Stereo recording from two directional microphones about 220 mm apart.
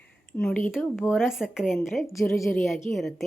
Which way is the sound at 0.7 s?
Centre (ahead or behind).